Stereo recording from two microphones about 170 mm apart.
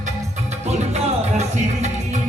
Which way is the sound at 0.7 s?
40° right (ahead or behind).